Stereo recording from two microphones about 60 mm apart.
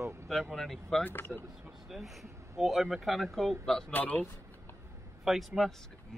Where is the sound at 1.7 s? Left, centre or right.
Centre.